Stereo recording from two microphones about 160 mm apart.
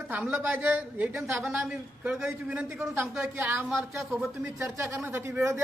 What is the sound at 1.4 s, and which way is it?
A man's voice, 5° right (ahead or behind).